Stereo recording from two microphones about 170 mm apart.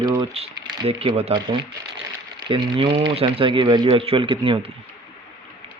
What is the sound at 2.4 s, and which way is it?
Speech, 25° right (ahead or behind).